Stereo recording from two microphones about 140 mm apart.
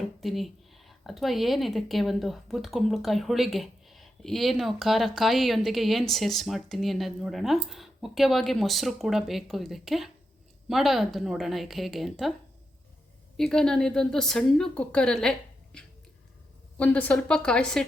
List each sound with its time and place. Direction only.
0.2 s speech: centre (ahead or behind)
13.3 s a woman's voice: 5° left (ahead or behind)